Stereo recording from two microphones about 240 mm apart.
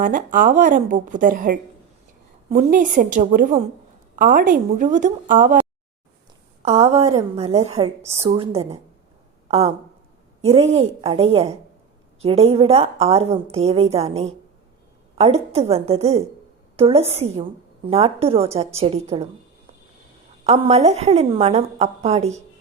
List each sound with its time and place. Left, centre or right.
0.0 s speech: right
6.6 s a woman's voice: right
20.4 s a woman's voice: right